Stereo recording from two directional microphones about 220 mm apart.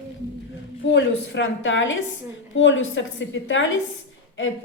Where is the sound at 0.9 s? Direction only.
55° left (ahead or behind).